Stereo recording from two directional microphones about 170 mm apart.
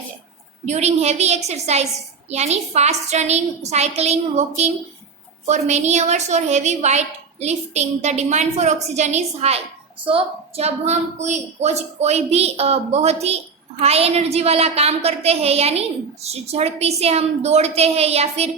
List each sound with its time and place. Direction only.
0.6 s a woman's voice: 40° right (ahead or behind)